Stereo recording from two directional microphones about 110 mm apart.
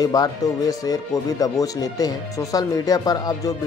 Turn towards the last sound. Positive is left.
turn(degrees=35)  # may be behind; listen again after turning